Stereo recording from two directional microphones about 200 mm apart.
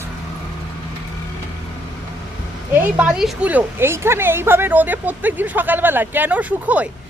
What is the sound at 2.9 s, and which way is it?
A woman's voice, 5° right (ahead or behind).